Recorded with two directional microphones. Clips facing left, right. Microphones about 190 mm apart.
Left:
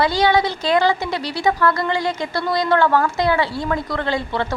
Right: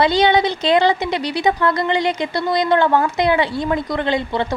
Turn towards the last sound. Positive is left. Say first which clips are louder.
# right 2 dB
turn(degrees=-20)  # may be behind; listen again after turning